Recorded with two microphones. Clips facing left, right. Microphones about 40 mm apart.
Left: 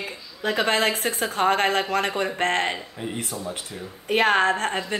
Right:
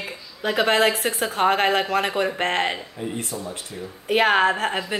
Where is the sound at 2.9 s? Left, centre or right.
Centre.